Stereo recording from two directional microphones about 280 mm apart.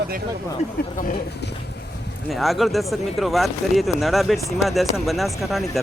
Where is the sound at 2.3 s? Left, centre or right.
Centre.